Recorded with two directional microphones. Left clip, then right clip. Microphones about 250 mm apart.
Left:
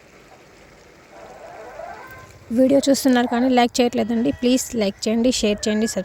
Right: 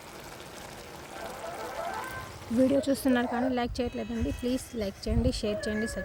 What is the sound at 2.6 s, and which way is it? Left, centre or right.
Speech, left.